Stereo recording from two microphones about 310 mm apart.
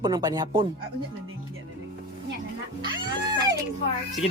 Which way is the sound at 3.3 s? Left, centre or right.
Centre.